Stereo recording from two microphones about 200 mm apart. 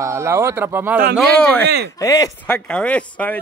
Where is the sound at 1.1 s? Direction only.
5° left (ahead or behind).